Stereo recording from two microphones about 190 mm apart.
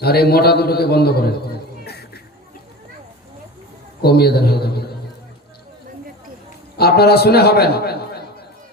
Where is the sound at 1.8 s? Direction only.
60° left (ahead or behind).